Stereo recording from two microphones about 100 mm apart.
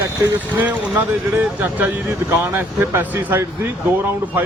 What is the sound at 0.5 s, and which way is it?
Speech, 15° right (ahead or behind).